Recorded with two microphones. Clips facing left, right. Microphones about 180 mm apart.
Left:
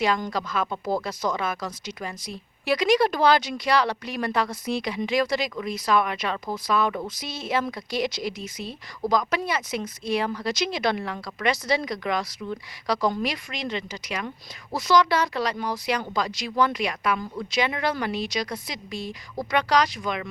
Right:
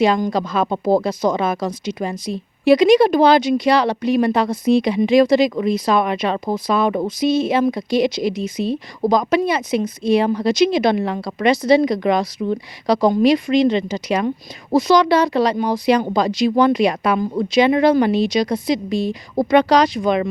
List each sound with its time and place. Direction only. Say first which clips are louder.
0.3 s speech: right 8 dB; 25° right (ahead or behind)